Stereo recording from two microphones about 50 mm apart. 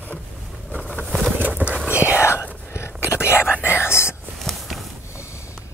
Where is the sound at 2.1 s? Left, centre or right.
Left.